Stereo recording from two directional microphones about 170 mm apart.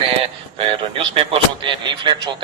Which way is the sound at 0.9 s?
30° right (ahead or behind).